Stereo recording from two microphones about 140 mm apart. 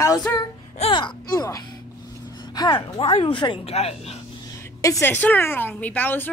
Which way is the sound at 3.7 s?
45° left (ahead or behind).